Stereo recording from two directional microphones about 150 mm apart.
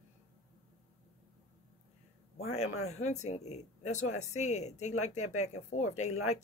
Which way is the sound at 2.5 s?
45° left (ahead or behind).